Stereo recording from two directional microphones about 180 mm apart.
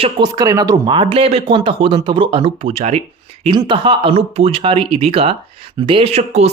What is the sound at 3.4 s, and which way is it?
Speech, 25° right (ahead or behind).